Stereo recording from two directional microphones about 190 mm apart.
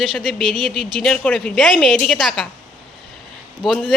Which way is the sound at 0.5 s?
25° right (ahead or behind).